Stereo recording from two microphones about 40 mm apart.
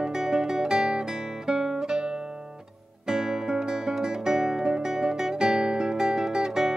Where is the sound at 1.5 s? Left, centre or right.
Centre.